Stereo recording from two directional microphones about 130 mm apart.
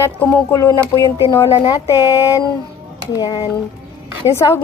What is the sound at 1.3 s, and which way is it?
Speech, 25° left (ahead or behind).